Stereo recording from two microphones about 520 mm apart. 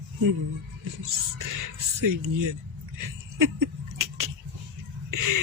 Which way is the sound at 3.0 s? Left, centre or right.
Right.